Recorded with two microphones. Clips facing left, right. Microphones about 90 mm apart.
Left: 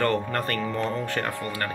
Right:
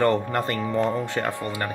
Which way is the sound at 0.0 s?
20° right (ahead or behind).